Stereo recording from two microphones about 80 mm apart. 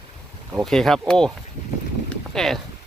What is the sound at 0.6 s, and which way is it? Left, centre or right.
Speech, centre.